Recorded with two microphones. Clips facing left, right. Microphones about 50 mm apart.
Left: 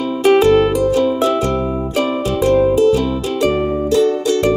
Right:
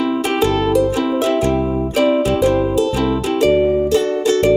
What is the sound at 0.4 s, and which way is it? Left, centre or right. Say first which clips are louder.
Music: left 3 dB; centre.